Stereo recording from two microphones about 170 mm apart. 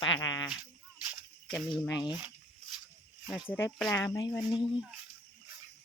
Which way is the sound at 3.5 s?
10° left (ahead or behind).